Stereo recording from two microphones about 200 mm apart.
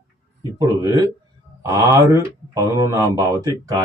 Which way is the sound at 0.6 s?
15° right (ahead or behind).